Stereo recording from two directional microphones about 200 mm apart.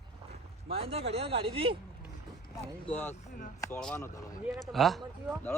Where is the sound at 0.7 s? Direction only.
30° right (ahead or behind).